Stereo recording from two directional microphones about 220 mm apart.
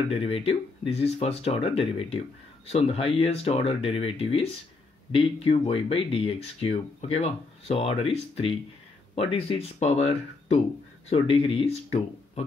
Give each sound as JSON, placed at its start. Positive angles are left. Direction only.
{"t": 0.1, "sound": "speech", "side_deg": 25}